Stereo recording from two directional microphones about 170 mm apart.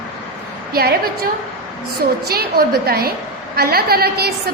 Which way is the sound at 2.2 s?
65° right (ahead or behind).